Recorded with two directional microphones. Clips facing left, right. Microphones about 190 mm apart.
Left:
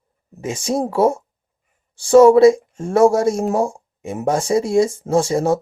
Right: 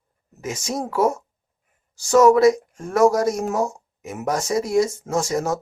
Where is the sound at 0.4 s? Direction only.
30° left (ahead or behind).